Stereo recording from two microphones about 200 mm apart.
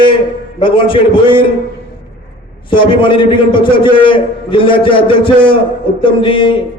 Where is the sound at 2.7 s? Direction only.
25° left (ahead or behind).